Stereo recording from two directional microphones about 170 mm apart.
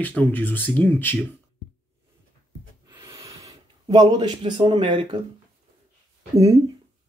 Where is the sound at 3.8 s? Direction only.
25° right (ahead or behind).